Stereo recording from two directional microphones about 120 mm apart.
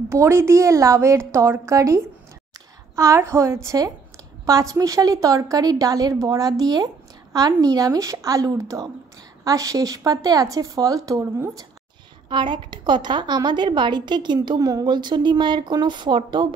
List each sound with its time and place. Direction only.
0.1 s a woman's voice: 20° right (ahead or behind)
12.3 s a woman's voice: 40° right (ahead or behind)